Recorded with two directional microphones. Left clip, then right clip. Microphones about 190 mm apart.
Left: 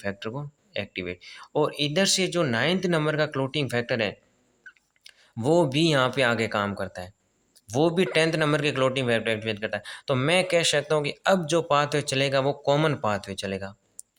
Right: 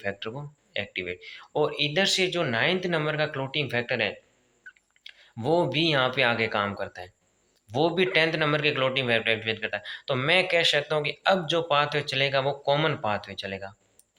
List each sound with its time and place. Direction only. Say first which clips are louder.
0.0 s speech: even; 55° left (ahead or behind)